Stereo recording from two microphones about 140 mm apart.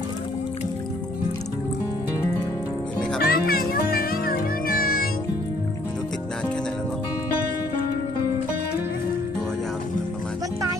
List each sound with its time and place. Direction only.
3.2 s music: 90° left